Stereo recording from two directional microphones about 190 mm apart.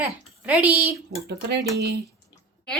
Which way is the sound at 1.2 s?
60° right (ahead or behind).